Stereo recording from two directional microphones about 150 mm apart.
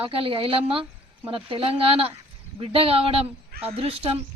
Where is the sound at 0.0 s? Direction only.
35° right (ahead or behind).